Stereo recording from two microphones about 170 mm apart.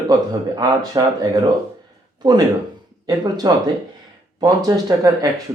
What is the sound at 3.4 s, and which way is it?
Speech, 25° right (ahead or behind).